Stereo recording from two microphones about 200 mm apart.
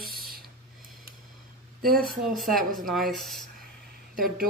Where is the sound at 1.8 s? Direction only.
45° right (ahead or behind).